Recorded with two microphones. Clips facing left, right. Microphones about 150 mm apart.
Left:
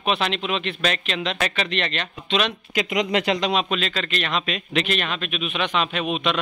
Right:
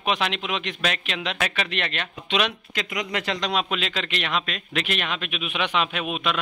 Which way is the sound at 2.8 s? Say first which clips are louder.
Left 7 dB; 20° left (ahead or behind).